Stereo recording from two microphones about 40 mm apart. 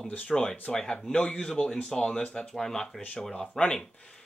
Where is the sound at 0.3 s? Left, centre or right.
Centre.